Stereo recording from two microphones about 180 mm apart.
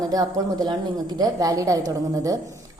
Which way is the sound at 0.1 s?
20° right (ahead or behind).